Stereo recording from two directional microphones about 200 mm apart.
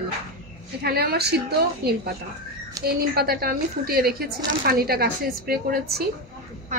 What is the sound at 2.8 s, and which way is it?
A woman's voice, 50° right (ahead or behind).